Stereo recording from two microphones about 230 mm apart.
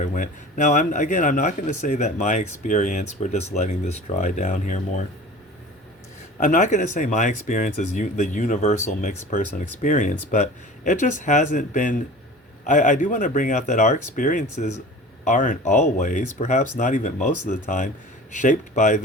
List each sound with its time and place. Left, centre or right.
0.0 s speech: left
6.4 s speech: left